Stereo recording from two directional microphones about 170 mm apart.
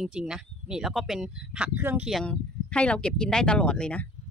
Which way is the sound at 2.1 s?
5° left (ahead or behind).